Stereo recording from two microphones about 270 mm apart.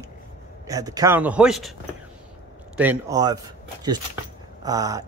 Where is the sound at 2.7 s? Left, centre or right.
Centre.